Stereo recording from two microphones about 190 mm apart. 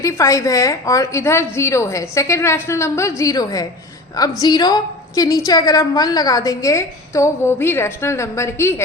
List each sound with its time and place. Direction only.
0.0 s a woman's voice: 15° left (ahead or behind)